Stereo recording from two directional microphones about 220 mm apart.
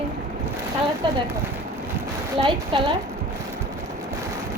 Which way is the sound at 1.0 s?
20° right (ahead or behind).